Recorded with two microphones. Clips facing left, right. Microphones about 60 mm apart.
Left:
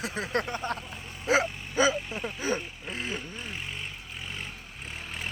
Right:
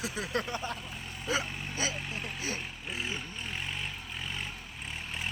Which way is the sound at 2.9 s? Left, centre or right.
Left.